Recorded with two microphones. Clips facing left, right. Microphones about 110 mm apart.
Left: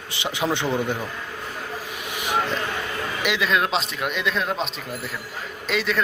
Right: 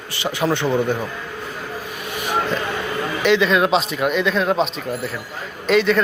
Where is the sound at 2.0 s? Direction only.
15° left (ahead or behind).